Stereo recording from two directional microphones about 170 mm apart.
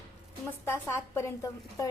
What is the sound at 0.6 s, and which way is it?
A woman's voice, 15° left (ahead or behind).